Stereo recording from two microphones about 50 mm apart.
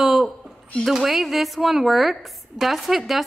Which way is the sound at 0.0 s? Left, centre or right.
Centre.